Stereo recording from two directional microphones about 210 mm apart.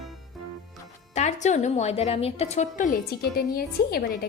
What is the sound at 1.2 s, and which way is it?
A woman's voice, 35° left (ahead or behind).